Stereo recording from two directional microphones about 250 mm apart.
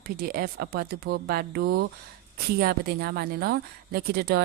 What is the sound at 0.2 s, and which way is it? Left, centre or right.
Speech, right.